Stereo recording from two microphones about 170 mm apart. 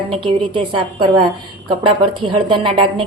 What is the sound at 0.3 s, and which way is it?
A woman's voice, 30° right (ahead or behind).